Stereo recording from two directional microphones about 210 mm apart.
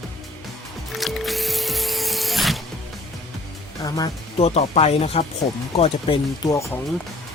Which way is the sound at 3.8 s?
20° left (ahead or behind).